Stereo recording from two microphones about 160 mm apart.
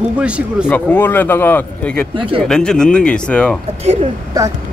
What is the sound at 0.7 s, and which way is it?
Speech, 10° left (ahead or behind).